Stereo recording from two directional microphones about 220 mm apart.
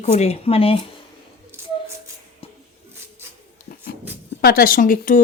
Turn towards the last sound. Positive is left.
turn(degrees=35)  # may be behind; listen again after turning